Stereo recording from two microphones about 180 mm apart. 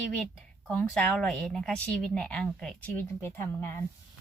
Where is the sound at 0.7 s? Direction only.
5° left (ahead or behind).